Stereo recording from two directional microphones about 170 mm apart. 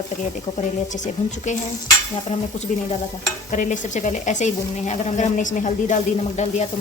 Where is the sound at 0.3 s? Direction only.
45° left (ahead or behind).